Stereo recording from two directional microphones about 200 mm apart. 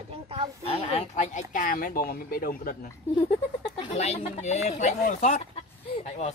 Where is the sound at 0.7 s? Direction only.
30° left (ahead or behind); by 2.8 s 45° left (ahead or behind).